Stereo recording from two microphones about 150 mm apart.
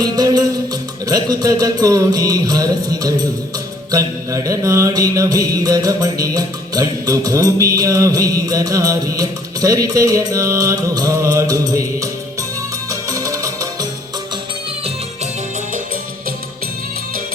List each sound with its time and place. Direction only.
0.0 s music: 25° right (ahead or behind)
1.0 s mantra: 25° right (ahead or behind)
12.9 s music: 20° right (ahead or behind)